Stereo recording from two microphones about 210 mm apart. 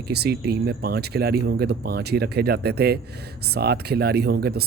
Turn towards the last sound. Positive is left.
turn(degrees=-50)  # may be behind; listen again after turning